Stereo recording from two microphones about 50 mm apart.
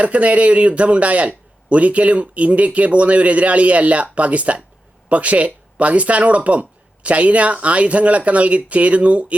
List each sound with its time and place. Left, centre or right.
0.0 s a man's voice: right